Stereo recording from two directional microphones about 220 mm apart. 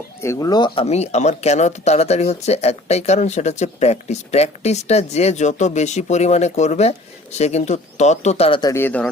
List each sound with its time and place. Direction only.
0.2 s speech: 15° left (ahead or behind)
8.7 s speech: 10° left (ahead or behind)